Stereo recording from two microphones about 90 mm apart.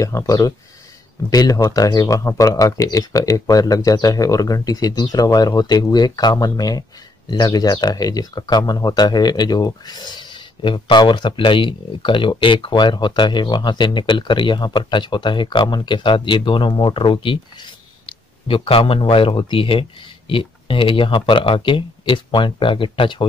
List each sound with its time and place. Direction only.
0.0 s speech: 40° left (ahead or behind); by 17.4 s 70° left (ahead or behind)
18.0 s speech: 90° left; by 23.2 s 70° left (ahead or behind)